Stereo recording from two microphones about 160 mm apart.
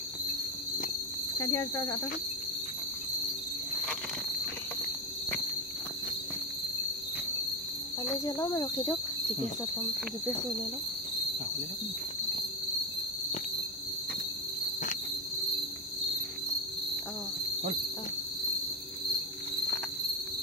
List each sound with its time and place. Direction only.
1.5 s speech: 20° left (ahead or behind)
8.3 s speech: 20° left (ahead or behind)